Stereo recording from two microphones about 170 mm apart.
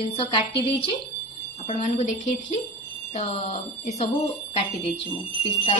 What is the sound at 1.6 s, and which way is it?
Speech, 40° left (ahead or behind).